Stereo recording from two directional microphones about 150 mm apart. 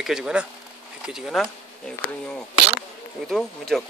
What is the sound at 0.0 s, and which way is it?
Speech, 5° right (ahead or behind).